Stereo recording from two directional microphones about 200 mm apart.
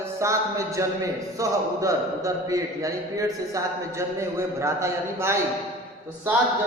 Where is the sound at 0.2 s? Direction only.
15° right (ahead or behind).